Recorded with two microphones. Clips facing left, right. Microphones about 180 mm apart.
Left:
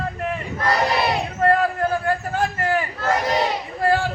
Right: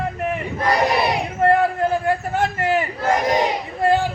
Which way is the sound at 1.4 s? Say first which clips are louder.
Right 2 dB; 25° right (ahead or behind).